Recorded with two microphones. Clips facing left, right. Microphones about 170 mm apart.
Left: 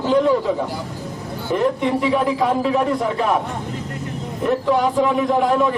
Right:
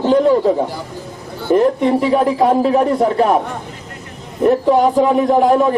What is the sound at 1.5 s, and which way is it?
A man's voice, 40° right (ahead or behind).